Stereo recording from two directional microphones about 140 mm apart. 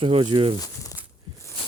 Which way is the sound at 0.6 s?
25° left (ahead or behind).